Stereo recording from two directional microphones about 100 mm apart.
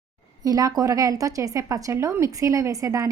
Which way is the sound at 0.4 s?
40° right (ahead or behind).